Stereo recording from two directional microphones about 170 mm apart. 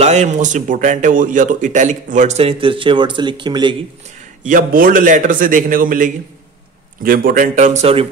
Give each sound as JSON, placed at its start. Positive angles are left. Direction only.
{"t": 0.0, "sound": "speech", "side_deg": -40}
{"t": 4.5, "sound": "speech", "side_deg": -55}